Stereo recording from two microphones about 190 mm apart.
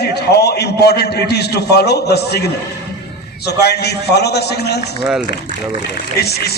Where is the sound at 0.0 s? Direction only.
60° left (ahead or behind).